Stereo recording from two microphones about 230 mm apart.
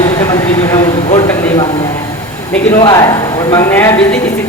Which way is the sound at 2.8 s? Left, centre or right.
Centre.